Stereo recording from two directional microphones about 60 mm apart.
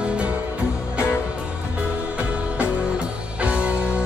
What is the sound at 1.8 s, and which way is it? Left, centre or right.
Music, centre.